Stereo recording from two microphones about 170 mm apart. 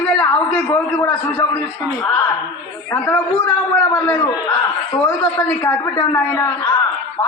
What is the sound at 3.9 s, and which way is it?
A man's voice, 20° left (ahead or behind).